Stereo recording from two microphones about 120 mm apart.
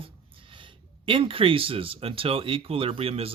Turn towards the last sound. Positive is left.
turn(degrees=-50)  # may be behind; listen again after turning